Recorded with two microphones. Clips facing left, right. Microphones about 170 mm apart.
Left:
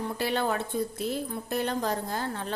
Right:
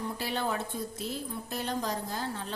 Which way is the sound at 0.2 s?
65° left (ahead or behind).